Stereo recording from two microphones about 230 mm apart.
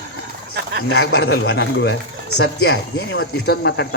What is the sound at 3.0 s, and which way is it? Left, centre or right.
Speech, left.